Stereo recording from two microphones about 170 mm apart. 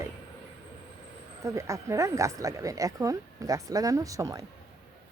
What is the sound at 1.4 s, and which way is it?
Speech, 20° right (ahead or behind).